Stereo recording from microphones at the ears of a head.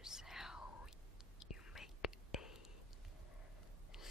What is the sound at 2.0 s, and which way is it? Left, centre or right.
Whispering, left.